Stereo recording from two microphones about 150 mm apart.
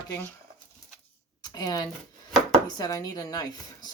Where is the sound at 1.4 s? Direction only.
25° left (ahead or behind).